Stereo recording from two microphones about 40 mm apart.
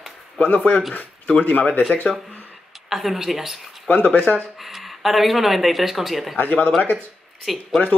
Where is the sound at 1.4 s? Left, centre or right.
Left.